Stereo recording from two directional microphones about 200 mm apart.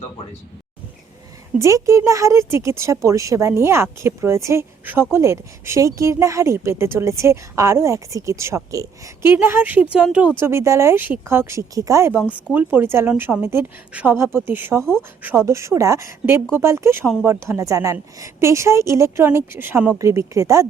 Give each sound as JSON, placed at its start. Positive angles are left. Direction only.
{"t": 1.5, "sound": "speech", "side_deg": -15}